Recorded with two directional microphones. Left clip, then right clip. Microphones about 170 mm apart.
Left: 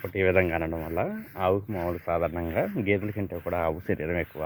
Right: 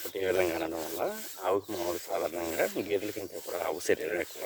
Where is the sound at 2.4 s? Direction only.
25° right (ahead or behind).